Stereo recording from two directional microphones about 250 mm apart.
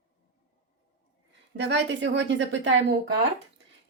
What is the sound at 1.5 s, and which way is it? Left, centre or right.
Speech, right.